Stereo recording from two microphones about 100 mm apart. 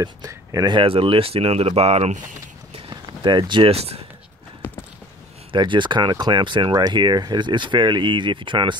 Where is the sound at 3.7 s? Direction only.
90° right.